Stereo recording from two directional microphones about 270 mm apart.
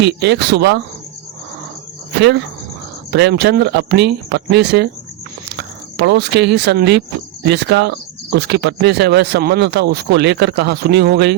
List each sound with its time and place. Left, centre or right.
0.0 s speech: right
2.2 s speech: right